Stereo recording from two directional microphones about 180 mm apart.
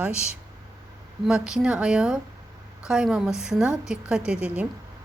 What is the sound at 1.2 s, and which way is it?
Speech, 5° right (ahead or behind).